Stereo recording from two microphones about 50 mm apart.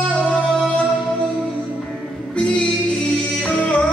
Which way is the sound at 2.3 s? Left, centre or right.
Left.